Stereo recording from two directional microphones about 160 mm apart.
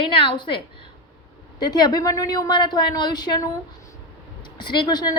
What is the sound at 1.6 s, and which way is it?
A woman's voice, 25° left (ahead or behind).